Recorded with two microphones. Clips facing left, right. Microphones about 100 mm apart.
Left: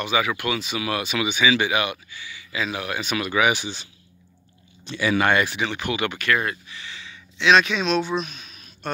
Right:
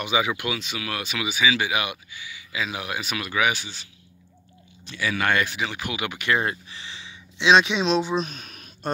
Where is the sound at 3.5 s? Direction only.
20° left (ahead or behind).